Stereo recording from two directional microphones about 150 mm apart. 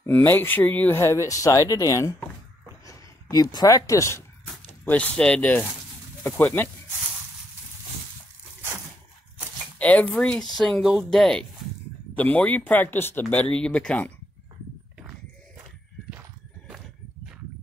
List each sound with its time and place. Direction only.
0.0 s speech: 15° left (ahead or behind)
4.8 s speech: 10° left (ahead or behind)
9.8 s speech: 10° left (ahead or behind)